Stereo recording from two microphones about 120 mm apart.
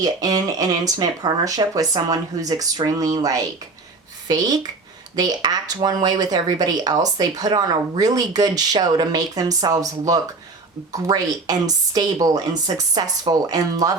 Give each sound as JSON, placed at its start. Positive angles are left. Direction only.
{"t": 0.0, "sound": "speech", "side_deg": -30}